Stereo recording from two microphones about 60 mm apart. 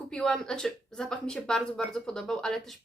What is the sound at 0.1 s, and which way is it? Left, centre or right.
Speech, centre.